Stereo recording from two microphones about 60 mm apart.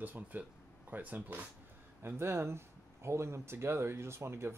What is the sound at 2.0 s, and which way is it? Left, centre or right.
Speech, right.